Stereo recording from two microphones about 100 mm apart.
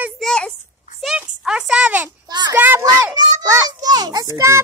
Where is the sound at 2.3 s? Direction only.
45° right (ahead or behind).